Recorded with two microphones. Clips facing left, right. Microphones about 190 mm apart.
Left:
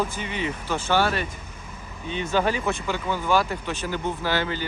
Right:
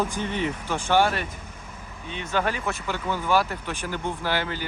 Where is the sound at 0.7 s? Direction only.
15° right (ahead or behind).